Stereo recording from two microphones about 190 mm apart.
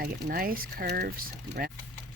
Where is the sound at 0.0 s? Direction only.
50° right (ahead or behind).